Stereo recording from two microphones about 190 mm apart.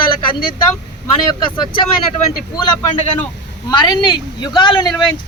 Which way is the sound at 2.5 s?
25° left (ahead or behind).